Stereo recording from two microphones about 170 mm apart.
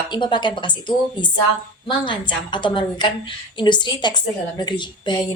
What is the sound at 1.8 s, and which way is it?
A woman's voice, 30° left (ahead or behind).